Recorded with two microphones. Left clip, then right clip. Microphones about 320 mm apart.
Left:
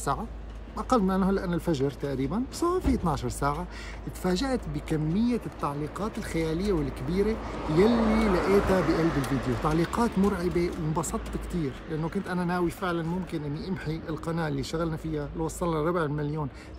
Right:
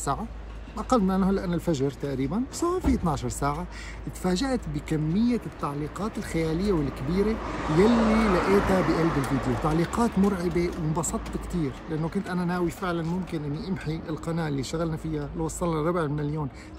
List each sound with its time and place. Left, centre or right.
0.7 s speech: centre
7.7 s speech: right
9.7 s speech: centre